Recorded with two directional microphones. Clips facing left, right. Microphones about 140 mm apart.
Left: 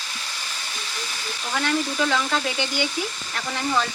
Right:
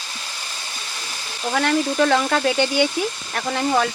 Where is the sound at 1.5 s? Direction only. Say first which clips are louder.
Right 5 dB; 55° right (ahead or behind).